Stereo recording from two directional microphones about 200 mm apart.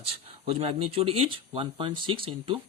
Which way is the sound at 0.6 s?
30° right (ahead or behind).